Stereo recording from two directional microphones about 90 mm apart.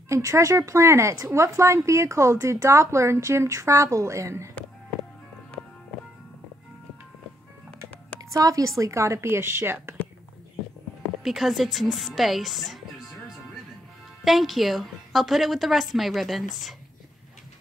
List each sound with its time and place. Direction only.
0.1 s speech: 35° right (ahead or behind)
8.2 s speech: 40° right (ahead or behind)
11.2 s a woman's voice: centre (ahead or behind)
14.2 s a woman's voice: centre (ahead or behind)